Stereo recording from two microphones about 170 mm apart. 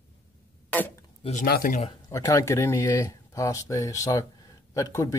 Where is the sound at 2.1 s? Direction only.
20° left (ahead or behind).